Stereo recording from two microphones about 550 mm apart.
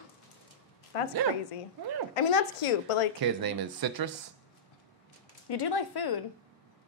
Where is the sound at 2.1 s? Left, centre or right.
Left.